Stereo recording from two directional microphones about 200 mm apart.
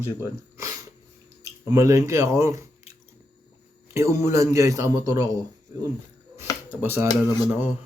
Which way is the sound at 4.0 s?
15° right (ahead or behind).